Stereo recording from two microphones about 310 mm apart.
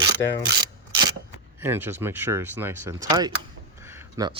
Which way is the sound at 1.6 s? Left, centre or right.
Centre.